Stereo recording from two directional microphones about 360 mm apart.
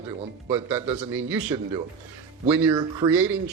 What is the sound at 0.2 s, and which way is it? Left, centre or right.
Speech, centre.